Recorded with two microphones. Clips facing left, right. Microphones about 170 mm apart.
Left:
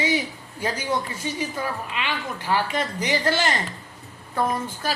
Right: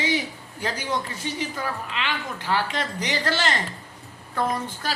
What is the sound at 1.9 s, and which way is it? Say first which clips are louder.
Speech: left 1 dB; 10° left (ahead or behind).